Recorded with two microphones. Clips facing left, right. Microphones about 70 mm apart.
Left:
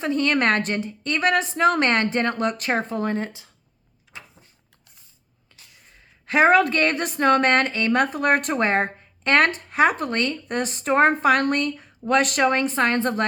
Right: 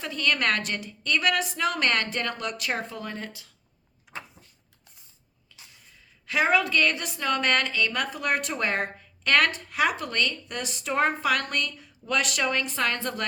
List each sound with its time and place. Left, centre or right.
0.0 s a woman's voice: left
6.2 s a woman's voice: left